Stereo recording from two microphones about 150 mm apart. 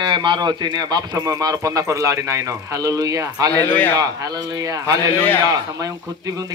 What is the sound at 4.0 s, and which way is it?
A man's voice, 25° right (ahead or behind).